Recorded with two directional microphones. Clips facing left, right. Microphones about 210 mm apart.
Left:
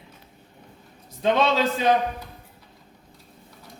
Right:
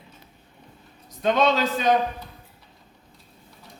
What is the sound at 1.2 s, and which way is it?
Speech, 25° left (ahead or behind).